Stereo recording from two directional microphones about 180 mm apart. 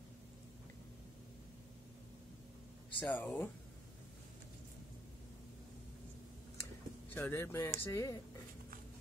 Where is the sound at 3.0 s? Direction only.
10° left (ahead or behind).